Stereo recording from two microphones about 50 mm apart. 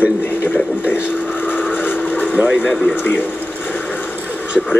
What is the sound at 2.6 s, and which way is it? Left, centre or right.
Speech, left.